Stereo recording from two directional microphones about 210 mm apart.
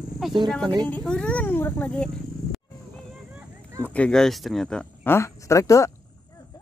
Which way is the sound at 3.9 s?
5° left (ahead or behind).